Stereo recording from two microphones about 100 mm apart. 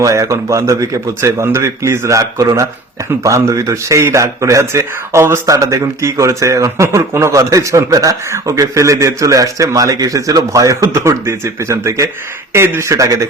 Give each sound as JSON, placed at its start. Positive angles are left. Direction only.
{"t": 0.0, "sound": "speech", "side_deg": -30}